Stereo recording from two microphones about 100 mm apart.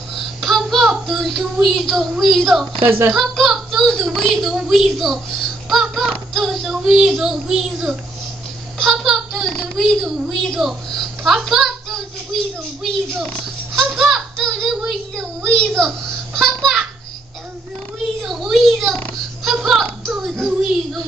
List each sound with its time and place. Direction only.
0.1 s a child's voice: centre (ahead or behind)
2.8 s speech: 25° right (ahead or behind)
3.1 s a woman's voice: centre (ahead or behind)
5.7 s child singing: centre (ahead or behind)
9.8 s a woman's voice: 5° left (ahead or behind)
13.7 s a sound: centre (ahead or behind)
16.3 s a woman's voice: centre (ahead or behind)
18.2 s a child's voice: centre (ahead or behind)
19.4 s a sound: centre (ahead or behind)